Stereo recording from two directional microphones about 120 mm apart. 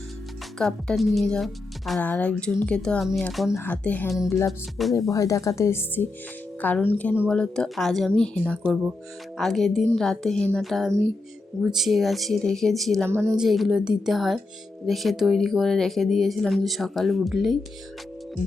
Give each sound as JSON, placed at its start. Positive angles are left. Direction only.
{"t": 0.6, "sound": "speech", "side_deg": 0}
{"t": 2.0, "sound": "speech", "side_deg": 10}
{"t": 3.6, "sound": "speech", "side_deg": 15}
{"t": 4.8, "sound": "speech", "side_deg": 0}
{"t": 5.1, "sound": "speech", "side_deg": 25}
{"t": 8.6, "sound": "speech", "side_deg": -15}
{"t": 9.4, "sound": "speech", "side_deg": 0}
{"t": 13.1, "sound": "speech", "side_deg": -20}
{"t": 13.4, "sound": "speech", "side_deg": -5}